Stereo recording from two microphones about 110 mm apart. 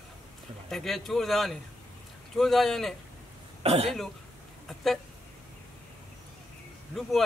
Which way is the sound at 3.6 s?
65° right (ahead or behind).